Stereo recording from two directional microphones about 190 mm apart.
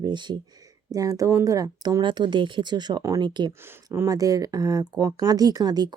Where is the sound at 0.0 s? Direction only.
25° right (ahead or behind).